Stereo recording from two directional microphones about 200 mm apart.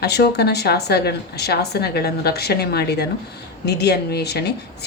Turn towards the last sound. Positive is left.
turn(degrees=55)  # may be behind; listen again after turning